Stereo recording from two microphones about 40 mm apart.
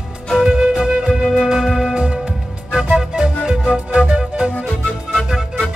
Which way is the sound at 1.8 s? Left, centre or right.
Centre.